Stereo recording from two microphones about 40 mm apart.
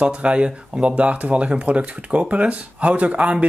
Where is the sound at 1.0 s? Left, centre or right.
Right.